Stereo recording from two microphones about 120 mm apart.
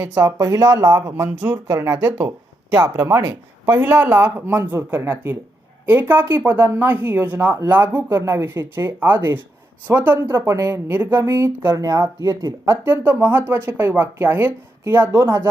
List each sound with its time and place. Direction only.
0.0 s speech: 20° right (ahead or behind)
0.3 s speech: 30° right (ahead or behind)
1.6 s speech: 30° right (ahead or behind)